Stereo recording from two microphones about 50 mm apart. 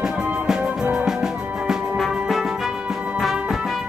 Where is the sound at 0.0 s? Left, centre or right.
Centre.